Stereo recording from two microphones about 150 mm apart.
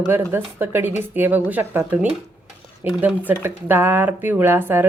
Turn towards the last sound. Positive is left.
turn(degrees=-15)  # may be behind; listen again after turning